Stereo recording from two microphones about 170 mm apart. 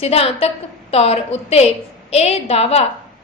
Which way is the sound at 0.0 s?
35° left (ahead or behind).